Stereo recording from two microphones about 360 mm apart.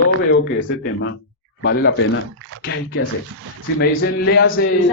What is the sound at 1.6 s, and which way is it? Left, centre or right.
A man's voice, left.